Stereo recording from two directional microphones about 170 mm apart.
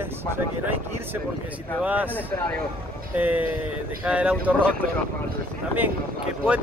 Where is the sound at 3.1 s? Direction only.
10° right (ahead or behind).